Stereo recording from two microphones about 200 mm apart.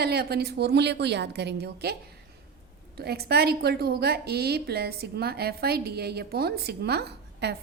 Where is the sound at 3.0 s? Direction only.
50° right (ahead or behind).